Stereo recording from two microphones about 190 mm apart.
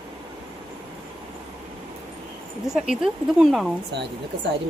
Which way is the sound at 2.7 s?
5° right (ahead or behind).